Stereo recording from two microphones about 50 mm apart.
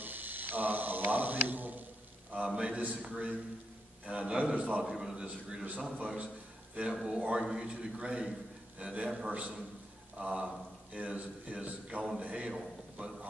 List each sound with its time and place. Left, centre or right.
0.0 s a sound: right
2.3 s a man's voice: right
3.1 s a man's voice: right
4.8 s a man's voice: centre
5.9 s a man's voice: right
6.9 s a man's voice: centre
12.5 s a sound: centre